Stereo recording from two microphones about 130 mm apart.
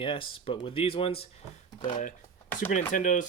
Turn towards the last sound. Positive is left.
turn(degrees=80)